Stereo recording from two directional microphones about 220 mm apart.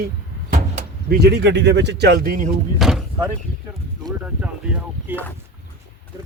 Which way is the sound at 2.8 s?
Centre (ahead or behind).